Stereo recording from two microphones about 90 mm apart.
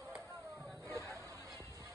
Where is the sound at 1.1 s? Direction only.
35° right (ahead or behind).